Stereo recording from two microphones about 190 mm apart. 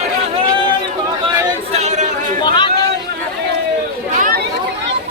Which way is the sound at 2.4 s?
25° left (ahead or behind).